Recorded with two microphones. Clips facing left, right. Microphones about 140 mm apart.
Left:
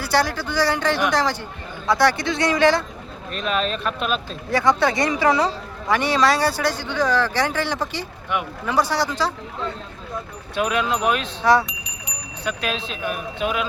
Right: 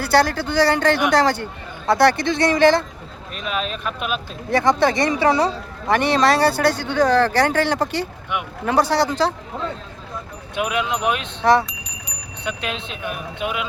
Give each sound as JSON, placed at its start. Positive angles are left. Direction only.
{"t": 0.0, "sound": "speech", "side_deg": -60}
{"t": 3.3, "sound": "speech", "side_deg": -5}
{"t": 4.5, "sound": "speech", "side_deg": -25}
{"t": 5.9, "sound": "speech", "side_deg": -50}
{"t": 10.5, "sound": "speech", "side_deg": -15}